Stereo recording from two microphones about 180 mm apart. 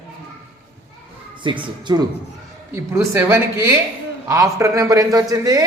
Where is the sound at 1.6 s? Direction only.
25° right (ahead or behind).